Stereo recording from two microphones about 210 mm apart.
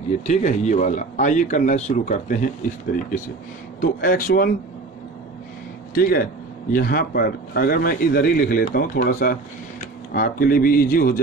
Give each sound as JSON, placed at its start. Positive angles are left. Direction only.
{"t": 0.3, "sound": "speech", "side_deg": 35}
{"t": 3.8, "sound": "speech", "side_deg": 40}
{"t": 5.9, "sound": "speech", "side_deg": 45}